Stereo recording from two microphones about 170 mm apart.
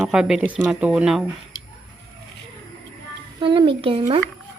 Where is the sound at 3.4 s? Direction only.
30° right (ahead or behind).